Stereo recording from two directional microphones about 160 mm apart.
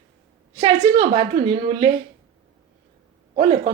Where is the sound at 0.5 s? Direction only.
35° right (ahead or behind).